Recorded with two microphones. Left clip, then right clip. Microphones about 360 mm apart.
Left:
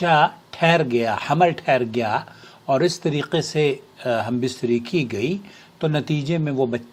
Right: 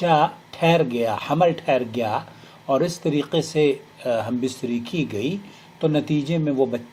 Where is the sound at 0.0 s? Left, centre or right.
Left.